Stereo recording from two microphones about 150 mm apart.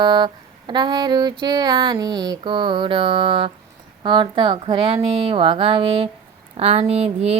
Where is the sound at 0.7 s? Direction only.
30° right (ahead or behind).